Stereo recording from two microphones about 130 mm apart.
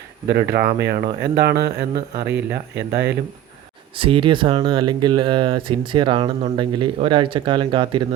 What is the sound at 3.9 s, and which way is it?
Speech, 45° right (ahead or behind).